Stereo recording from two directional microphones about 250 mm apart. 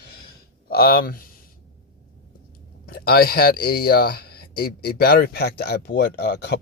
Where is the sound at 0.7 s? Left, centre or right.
Left.